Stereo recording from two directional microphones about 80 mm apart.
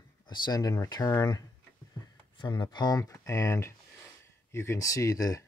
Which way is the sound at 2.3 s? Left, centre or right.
Left.